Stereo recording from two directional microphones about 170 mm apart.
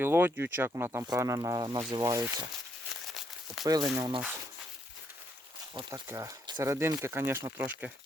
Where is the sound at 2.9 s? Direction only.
Centre (ahead or behind).